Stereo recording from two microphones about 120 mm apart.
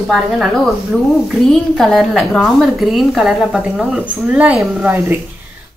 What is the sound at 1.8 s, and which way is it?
A woman's voice, centre (ahead or behind).